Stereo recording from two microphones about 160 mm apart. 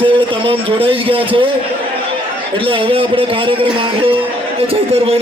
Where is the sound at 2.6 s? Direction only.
35° right (ahead or behind).